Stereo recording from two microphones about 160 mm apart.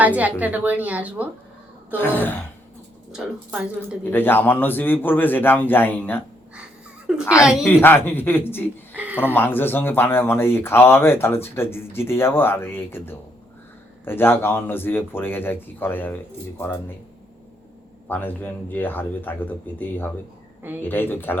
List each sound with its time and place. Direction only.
0.2 s speech: 10° right (ahead or behind)
2.0 s speech: 10° left (ahead or behind)
3.1 s speech: 5° right (ahead or behind)
4.1 s speech: 15° left (ahead or behind)
7.1 s speech: centre (ahead or behind)
7.6 s speech: 15° left (ahead or behind)
9.0 s a sound: 10° right (ahead or behind)
9.2 s speech: 15° left (ahead or behind)
18.1 s speech: 10° left (ahead or behind)
20.6 s speech: 15° right (ahead or behind)
20.8 s speech: 15° left (ahead or behind)